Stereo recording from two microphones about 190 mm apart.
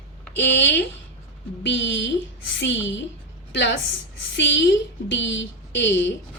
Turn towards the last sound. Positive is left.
turn(degrees=70)  # may be behind; listen again after turning